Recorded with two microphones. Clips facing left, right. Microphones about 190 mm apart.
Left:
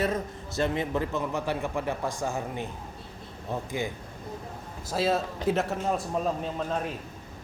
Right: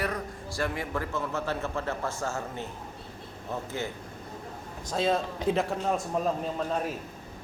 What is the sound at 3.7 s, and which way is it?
Speech, 15° left (ahead or behind).